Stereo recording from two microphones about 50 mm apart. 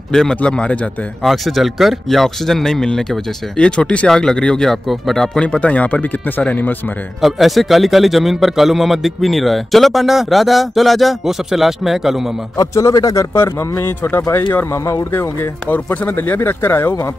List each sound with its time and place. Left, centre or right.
0.1 s speech: centre
0.4 s speech: left
1.2 s speech: centre
4.8 s speech: centre
5.4 s speech: left
7.2 s a man's voice: centre
12.7 s speech: left
15.7 s speech: left